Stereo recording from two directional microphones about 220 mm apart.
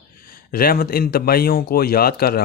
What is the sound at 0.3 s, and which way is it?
A man's voice, 40° left (ahead or behind).